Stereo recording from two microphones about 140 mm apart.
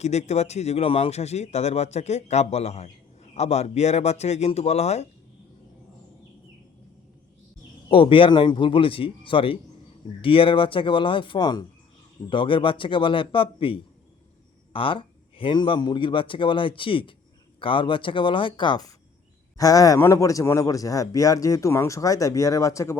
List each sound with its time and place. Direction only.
0.0 s speech: 55° left (ahead or behind)
7.9 s a man's voice: 40° left (ahead or behind); by 23.0 s 20° left (ahead or behind)